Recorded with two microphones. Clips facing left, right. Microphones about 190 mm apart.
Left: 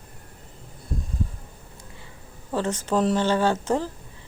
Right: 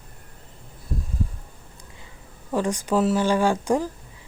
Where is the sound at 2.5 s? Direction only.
10° right (ahead or behind).